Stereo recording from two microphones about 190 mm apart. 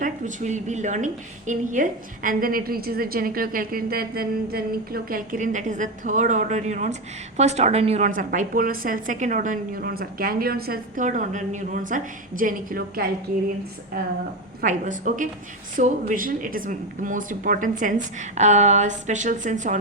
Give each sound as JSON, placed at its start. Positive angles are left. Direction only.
{"t": 0.0, "sound": "a woman's voice", "side_deg": -40}
{"t": 14.6, "sound": "a woman's voice", "side_deg": -45}